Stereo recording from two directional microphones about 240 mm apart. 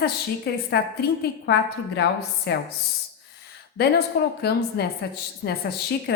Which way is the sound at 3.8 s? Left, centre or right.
Left.